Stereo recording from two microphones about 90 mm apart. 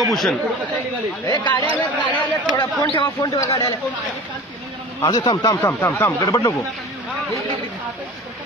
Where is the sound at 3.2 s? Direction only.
35° left (ahead or behind).